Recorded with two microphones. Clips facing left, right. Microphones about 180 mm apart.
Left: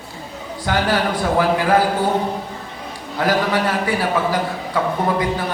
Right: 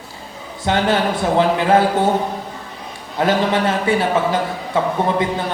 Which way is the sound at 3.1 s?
25° right (ahead or behind).